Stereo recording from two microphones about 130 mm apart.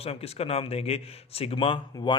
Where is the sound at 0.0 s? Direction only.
50° left (ahead or behind).